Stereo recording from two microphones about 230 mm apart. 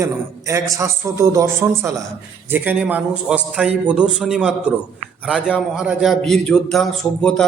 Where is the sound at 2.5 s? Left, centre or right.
Centre.